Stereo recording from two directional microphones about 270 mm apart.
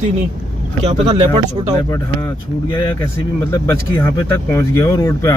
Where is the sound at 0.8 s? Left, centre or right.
Right.